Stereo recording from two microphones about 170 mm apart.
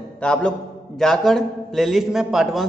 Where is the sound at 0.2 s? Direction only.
5° left (ahead or behind).